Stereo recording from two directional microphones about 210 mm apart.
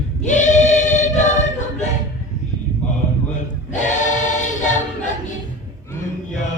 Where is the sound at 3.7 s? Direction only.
35° left (ahead or behind).